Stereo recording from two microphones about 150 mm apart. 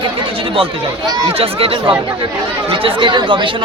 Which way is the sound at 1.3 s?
40° right (ahead or behind).